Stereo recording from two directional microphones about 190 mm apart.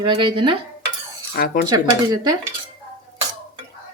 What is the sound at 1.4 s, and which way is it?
Speech, 55° left (ahead or behind).